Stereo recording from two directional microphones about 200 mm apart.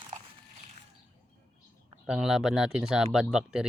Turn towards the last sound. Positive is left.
turn(degrees=-5)  # may be behind; listen again after turning